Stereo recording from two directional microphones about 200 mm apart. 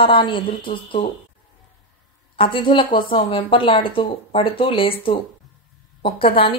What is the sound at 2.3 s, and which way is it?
A woman's voice, 25° left (ahead or behind).